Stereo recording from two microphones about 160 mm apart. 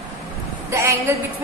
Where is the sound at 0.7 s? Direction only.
15° right (ahead or behind).